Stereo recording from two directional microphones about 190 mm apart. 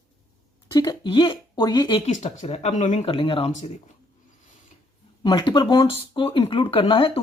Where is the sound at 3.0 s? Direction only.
30° left (ahead or behind).